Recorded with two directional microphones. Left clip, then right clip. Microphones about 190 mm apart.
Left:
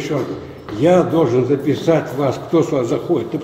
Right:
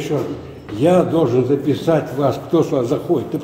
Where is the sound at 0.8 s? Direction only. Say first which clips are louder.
Left 1 dB; 15° right (ahead or behind).